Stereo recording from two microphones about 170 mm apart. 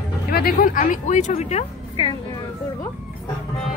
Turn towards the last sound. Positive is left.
turn(degrees=35)  # may be behind; listen again after turning